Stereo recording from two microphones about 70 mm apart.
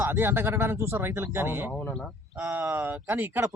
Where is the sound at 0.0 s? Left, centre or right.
Right.